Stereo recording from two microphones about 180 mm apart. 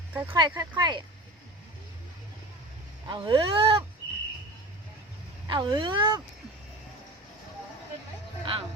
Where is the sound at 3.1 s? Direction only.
25° right (ahead or behind).